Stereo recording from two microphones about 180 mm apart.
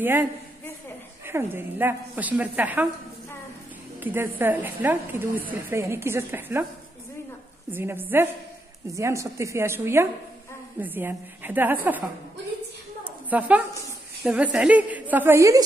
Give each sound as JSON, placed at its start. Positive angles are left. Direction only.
{"t": 0.0, "sound": "a woman's voice", "side_deg": -10}
{"t": 4.0, "sound": "a woman's voice", "side_deg": -10}
{"t": 7.7, "sound": "a woman's voice", "side_deg": -10}
{"t": 13.0, "sound": "a sound", "side_deg": -10}
{"t": 14.2, "sound": "a woman's voice", "side_deg": -5}